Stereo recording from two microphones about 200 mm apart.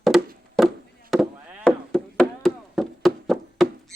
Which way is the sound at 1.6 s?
5° left (ahead or behind).